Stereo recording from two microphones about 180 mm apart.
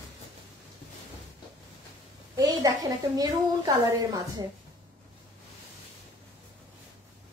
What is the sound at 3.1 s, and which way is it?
A child's voice, 20° right (ahead or behind).